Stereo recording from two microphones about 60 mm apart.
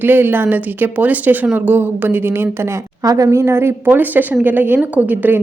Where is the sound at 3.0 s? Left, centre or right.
Right.